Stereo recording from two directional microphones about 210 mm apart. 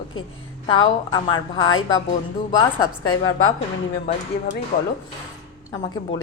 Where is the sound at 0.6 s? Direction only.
25° left (ahead or behind).